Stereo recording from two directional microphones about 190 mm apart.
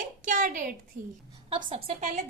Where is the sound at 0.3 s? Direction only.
45° right (ahead or behind).